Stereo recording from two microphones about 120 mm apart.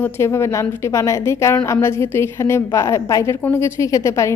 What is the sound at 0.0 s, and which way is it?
A woman's voice, 20° left (ahead or behind).